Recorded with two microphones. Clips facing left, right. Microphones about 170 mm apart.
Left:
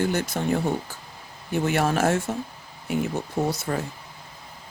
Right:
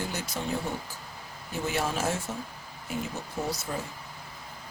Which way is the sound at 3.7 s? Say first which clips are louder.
Left 7 dB; 70° left (ahead or behind).